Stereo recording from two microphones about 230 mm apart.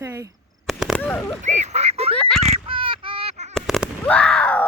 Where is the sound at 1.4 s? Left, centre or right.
Right.